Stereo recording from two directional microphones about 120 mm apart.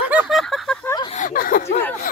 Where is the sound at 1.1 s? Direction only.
75° left (ahead or behind).